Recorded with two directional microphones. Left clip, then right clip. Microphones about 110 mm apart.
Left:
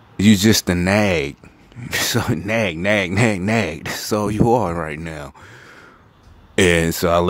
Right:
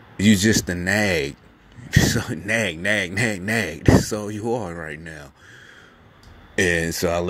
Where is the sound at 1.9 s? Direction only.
35° left (ahead or behind).